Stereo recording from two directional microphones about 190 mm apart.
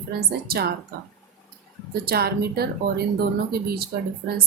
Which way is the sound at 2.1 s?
55° right (ahead or behind).